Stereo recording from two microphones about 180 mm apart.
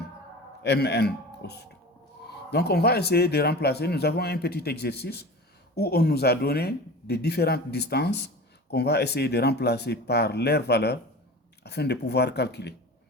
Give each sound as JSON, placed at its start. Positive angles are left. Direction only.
{"t": 0.6, "sound": "a man's voice", "side_deg": 65}